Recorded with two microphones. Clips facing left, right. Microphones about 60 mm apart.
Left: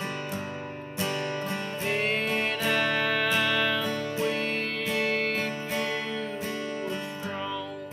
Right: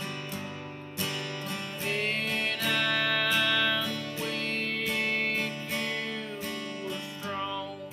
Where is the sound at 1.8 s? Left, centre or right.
Centre.